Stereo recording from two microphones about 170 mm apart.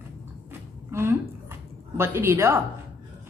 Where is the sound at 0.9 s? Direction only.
15° right (ahead or behind).